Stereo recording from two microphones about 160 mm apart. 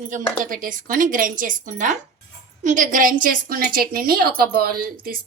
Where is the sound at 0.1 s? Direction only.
55° right (ahead or behind).